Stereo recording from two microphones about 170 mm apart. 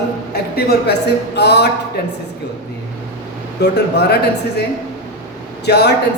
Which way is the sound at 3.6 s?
75° left (ahead or behind).